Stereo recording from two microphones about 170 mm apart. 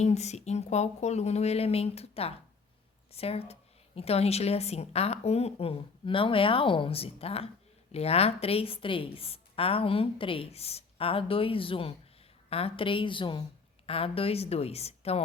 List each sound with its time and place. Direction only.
0.0 s a woman's voice: 40° left (ahead or behind)